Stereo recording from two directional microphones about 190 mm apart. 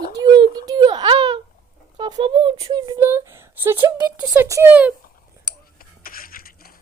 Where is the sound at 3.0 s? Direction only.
10° right (ahead or behind).